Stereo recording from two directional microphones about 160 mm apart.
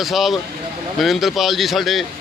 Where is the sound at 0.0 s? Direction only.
Centre (ahead or behind).